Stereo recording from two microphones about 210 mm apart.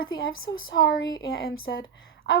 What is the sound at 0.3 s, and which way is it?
Speech, 70° left (ahead or behind).